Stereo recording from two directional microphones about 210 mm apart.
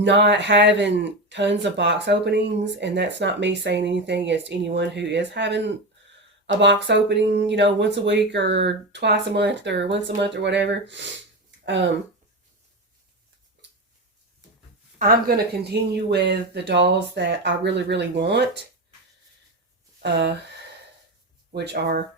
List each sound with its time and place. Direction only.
0.0 s speech: 55° right (ahead or behind)
14.9 s speech: 45° right (ahead or behind)
20.0 s speech: 55° right (ahead or behind)
21.5 s speech: 50° right (ahead or behind)